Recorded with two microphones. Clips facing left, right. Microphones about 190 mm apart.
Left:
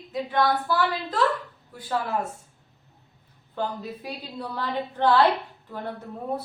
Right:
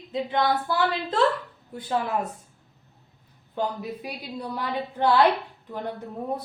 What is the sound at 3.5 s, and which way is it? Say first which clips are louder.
A woman's voice: right 2 dB; 15° right (ahead or behind).